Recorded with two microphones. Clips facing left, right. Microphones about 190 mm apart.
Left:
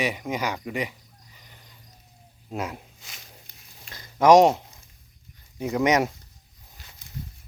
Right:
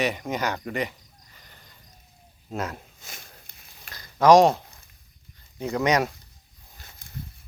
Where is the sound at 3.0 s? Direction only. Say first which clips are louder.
Right 2 dB; 50° right (ahead or behind).